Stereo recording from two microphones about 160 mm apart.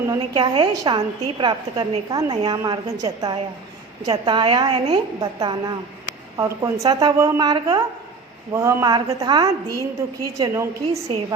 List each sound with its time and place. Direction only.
0.1 s a woman's voice: 30° right (ahead or behind)